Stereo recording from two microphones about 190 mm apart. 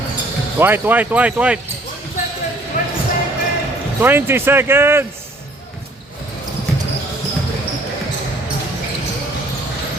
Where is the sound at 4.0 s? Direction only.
10° right (ahead or behind).